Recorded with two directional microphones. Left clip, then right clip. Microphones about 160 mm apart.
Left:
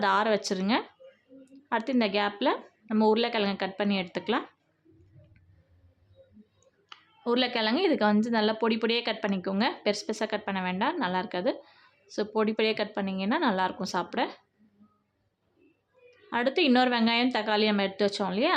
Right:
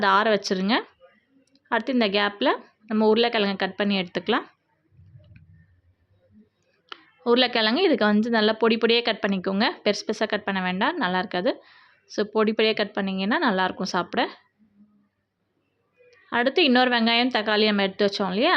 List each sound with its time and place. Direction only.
0.0 s a woman's voice: 20° right (ahead or behind)
6.9 s speech: 20° right (ahead or behind)
16.3 s speech: 20° right (ahead or behind)